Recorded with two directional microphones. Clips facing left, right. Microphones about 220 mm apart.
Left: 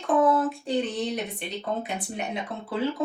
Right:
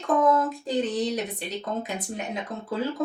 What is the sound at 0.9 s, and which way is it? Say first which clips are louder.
Speech: right 2 dB; 35° right (ahead or behind).